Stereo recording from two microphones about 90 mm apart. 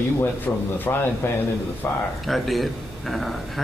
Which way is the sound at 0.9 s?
25° left (ahead or behind).